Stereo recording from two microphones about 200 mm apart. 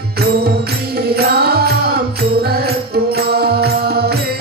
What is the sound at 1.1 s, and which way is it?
Music, 50° right (ahead or behind).